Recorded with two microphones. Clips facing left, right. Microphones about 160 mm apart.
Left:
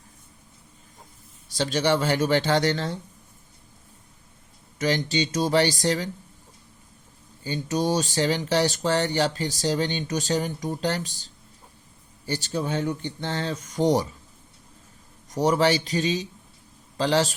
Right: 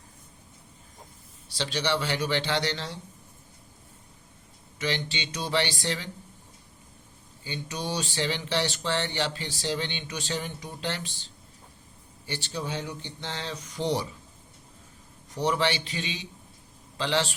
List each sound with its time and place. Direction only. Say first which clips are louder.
1.5 s speech: left 6 dB; 45° left (ahead or behind)
4.8 s speech: left 7 dB; 45° left (ahead or behind)
7.4 s speech: left 9 dB; 45° left (ahead or behind)
15.3 s speech: left 6 dB; 40° left (ahead or behind)